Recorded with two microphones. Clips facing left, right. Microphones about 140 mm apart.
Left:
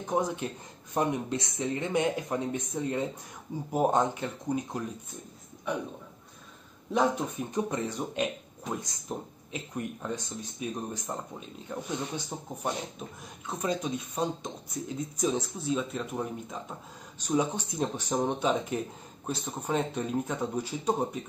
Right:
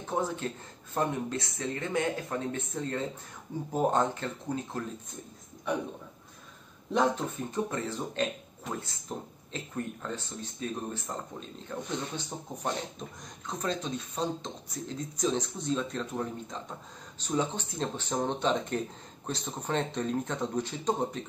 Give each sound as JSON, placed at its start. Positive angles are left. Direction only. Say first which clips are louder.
{"t": 0.0, "sound": "speech", "louder": "left 2 dB", "side_deg": 15}
{"t": 6.9, "sound": "speech", "louder": "left 1 dB", "side_deg": 10}